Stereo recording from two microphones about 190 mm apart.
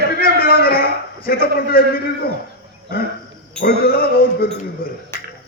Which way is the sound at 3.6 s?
50° left (ahead or behind).